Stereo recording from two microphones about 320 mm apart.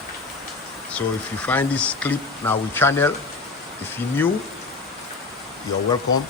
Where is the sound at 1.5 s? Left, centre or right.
Centre.